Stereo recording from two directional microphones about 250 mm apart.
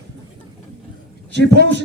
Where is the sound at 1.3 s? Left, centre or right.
Right.